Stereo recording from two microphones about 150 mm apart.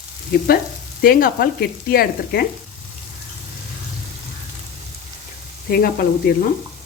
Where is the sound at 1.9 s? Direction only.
90° left.